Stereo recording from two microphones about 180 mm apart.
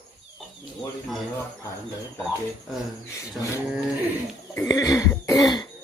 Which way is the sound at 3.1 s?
15° left (ahead or behind).